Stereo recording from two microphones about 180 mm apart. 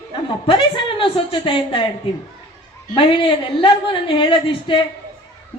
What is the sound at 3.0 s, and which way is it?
A woman's voice, 30° left (ahead or behind).